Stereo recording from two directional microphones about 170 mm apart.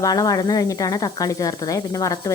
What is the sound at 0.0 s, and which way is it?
A woman's voice, 20° left (ahead or behind).